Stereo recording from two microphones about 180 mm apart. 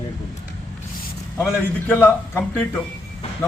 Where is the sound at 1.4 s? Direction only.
10° left (ahead or behind).